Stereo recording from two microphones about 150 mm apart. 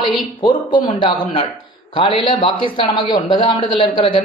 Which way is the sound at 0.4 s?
30° left (ahead or behind).